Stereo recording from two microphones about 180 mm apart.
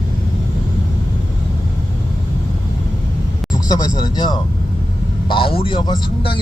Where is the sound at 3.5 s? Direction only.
20° left (ahead or behind).